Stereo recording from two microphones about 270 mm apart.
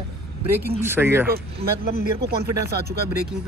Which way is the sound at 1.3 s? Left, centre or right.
Right.